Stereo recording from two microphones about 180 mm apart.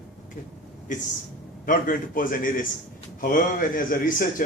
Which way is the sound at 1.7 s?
50° left (ahead or behind).